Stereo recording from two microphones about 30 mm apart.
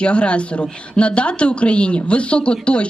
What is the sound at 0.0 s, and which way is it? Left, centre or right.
Speech, left.